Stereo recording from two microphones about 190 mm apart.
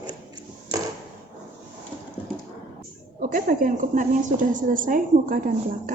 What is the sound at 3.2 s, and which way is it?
A woman's voice, 45° right (ahead or behind).